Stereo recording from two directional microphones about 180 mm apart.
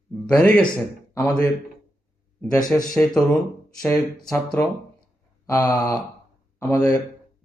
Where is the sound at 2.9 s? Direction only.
5° left (ahead or behind).